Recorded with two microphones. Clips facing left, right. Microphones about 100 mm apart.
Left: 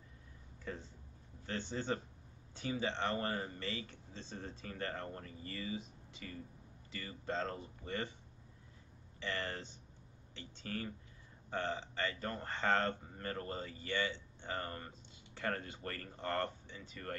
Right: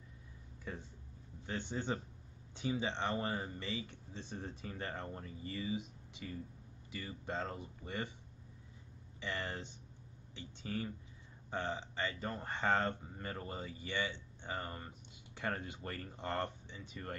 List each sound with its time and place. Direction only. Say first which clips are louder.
0.7 s speech: left 1 dB; 10° right (ahead or behind)
9.2 s speech: even; 15° right (ahead or behind)